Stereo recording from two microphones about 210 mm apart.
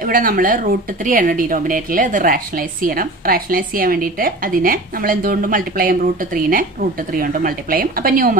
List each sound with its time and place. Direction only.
0.0 s a woman's voice: 40° right (ahead or behind)